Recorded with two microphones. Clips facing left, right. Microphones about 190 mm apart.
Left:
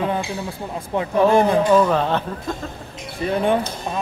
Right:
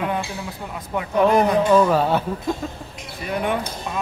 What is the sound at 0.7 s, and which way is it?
Speech, 30° left (ahead or behind).